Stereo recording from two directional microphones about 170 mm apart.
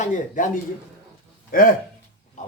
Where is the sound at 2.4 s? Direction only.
45° left (ahead or behind).